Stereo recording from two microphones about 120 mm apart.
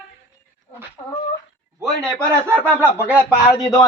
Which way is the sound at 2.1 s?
25° right (ahead or behind).